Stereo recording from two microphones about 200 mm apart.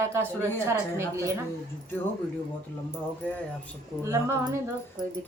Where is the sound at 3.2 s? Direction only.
5° left (ahead or behind).